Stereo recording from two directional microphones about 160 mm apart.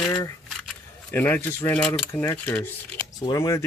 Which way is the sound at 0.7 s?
10° left (ahead or behind).